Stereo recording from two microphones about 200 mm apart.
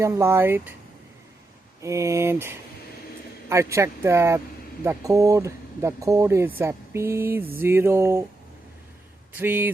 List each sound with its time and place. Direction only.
0.0 s speech: 15° right (ahead or behind)
1.8 s speech: 15° right (ahead or behind)
9.3 s speech: 10° right (ahead or behind)